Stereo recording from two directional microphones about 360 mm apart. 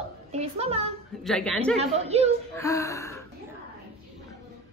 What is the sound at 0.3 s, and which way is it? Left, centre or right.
Speech, centre.